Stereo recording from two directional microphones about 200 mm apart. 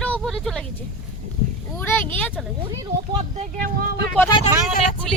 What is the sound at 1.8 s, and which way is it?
Speech, 10° left (ahead or behind).